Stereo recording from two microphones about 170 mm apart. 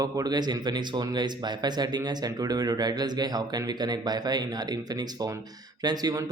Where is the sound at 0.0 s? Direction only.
25° right (ahead or behind).